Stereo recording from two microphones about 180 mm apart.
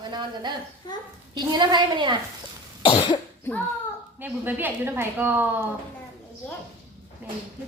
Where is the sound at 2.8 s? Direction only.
25° left (ahead or behind).